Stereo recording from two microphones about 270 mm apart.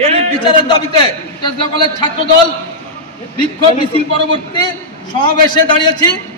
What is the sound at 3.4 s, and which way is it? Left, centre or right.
A man's voice, centre.